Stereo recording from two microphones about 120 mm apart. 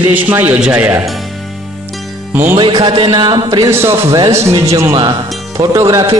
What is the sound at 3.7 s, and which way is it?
Speech, 20° right (ahead or behind).